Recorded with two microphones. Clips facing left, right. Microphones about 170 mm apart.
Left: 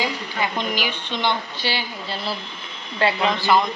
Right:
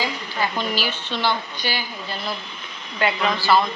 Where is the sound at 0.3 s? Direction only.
20° left (ahead or behind).